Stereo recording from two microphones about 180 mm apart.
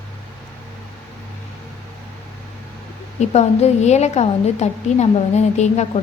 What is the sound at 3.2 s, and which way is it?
A woman's voice, 40° left (ahead or behind).